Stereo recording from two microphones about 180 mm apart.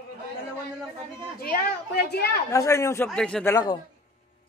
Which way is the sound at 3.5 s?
25° left (ahead or behind).